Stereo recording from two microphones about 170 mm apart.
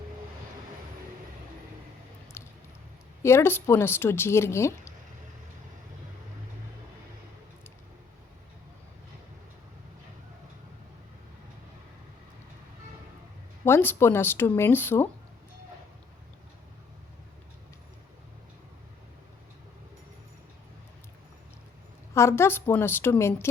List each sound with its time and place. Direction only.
2.4 s a sound: 15° left (ahead or behind)
3.2 s speech: 15° left (ahead or behind)
13.7 s speech: 15° left (ahead or behind)
22.1 s speech: 15° left (ahead or behind)